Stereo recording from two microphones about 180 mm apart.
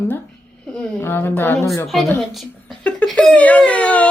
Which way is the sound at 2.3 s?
Centre (ahead or behind).